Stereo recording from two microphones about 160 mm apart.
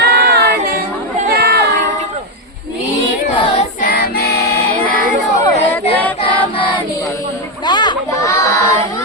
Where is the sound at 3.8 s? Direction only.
65° left (ahead or behind).